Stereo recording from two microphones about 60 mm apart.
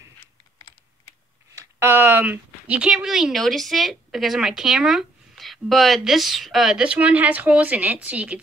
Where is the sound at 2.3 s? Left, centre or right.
Right.